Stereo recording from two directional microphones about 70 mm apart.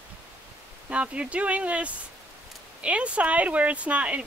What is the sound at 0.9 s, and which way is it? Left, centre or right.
Speech, centre.